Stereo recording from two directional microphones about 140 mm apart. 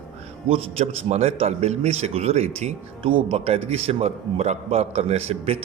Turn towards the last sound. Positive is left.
turn(degrees=-50)  # may be behind; listen again after turning